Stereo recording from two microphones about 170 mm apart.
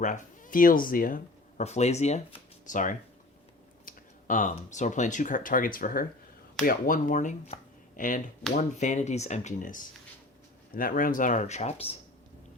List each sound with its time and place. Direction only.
0.0 s speech: 50° left (ahead or behind)